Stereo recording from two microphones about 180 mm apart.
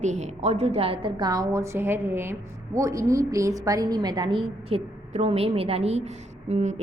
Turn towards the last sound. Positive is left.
turn(degrees=-40)  # may be behind; listen again after turning